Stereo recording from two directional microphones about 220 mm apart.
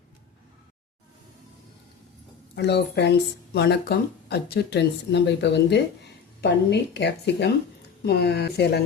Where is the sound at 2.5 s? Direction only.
50° left (ahead or behind).